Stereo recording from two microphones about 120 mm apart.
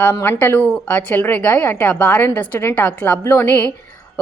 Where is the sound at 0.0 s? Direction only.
15° left (ahead or behind).